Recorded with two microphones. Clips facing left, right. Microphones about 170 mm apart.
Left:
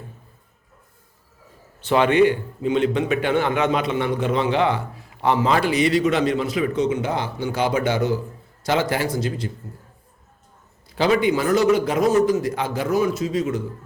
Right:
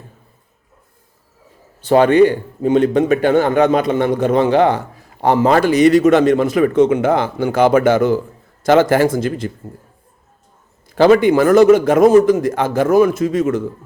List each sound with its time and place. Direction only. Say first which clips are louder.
1.9 s a man's voice: right 6 dB; 40° right (ahead or behind)
10.8 s a man's voice: right 8 dB; 50° right (ahead or behind)